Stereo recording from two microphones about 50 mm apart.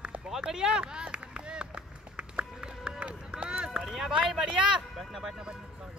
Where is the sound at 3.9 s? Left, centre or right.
Centre.